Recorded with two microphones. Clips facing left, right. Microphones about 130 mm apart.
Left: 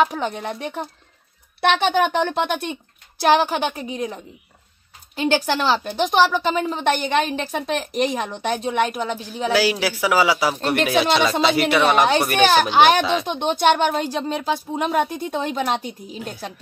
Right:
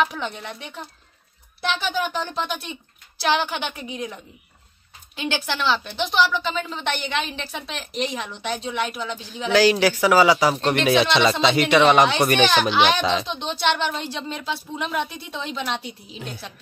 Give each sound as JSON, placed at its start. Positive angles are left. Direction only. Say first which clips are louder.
{"t": 0.0, "sound": "a woman's voice", "louder": "left 4 dB", "side_deg": 40}
{"t": 1.6, "sound": "a woman's voice", "louder": "left 7 dB", "side_deg": 65}
{"t": 9.5, "sound": "speech", "louder": "right 3 dB", "side_deg": 10}
{"t": 12.7, "sound": "a woman's voice", "louder": "left 4 dB", "side_deg": 45}